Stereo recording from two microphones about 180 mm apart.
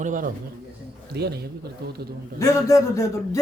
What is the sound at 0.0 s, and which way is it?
Speech, 45° right (ahead or behind).